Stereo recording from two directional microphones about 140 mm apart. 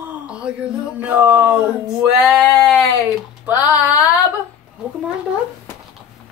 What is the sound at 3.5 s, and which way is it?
Male singing, 10° right (ahead or behind).